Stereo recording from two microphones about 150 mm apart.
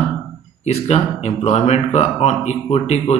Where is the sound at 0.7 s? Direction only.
45° left (ahead or behind).